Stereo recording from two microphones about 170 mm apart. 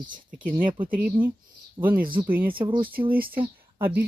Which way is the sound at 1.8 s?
25° right (ahead or behind).